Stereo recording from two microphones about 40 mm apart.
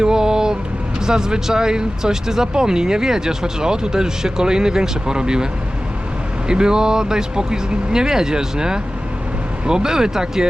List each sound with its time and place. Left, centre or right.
0.0 s vehicle: centre
1.0 s speech: centre
6.5 s speech: centre